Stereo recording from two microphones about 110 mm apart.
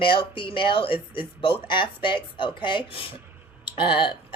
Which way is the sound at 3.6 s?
45° left (ahead or behind).